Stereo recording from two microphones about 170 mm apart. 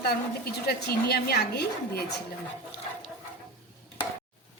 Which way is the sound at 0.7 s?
65° left (ahead or behind).